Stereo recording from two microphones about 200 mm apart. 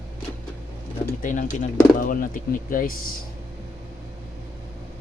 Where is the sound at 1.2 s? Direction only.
40° left (ahead or behind).